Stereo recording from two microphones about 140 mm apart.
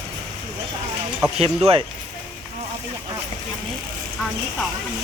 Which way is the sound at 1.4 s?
45° right (ahead or behind).